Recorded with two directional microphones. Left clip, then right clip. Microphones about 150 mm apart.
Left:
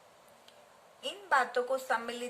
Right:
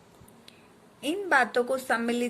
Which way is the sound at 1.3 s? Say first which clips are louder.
Right 5 dB; 35° right (ahead or behind).